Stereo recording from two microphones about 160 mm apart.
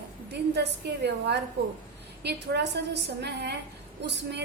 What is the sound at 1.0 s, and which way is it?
A woman's voice, 90° right.